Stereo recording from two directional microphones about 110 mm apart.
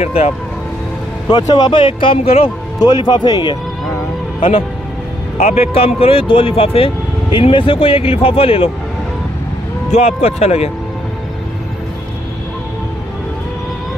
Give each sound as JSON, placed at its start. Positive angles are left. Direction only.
{"t": 0.0, "sound": "speech", "side_deg": 85}
{"t": 1.5, "sound": "speech", "side_deg": 45}
{"t": 2.8, "sound": "speech", "side_deg": 35}
{"t": 4.4, "sound": "speech", "side_deg": 55}
{"t": 5.4, "sound": "speech", "side_deg": 75}
{"t": 5.9, "sound": "speech", "side_deg": 60}
{"t": 7.3, "sound": "speech", "side_deg": 50}
{"t": 9.8, "sound": "speech", "side_deg": 85}